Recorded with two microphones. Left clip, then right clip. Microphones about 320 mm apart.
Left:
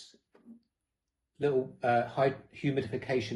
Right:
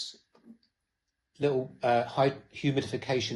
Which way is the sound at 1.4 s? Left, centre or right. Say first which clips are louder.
Right 1 dB; right.